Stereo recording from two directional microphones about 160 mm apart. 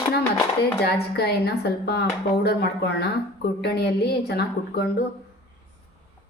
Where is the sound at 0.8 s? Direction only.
85° left.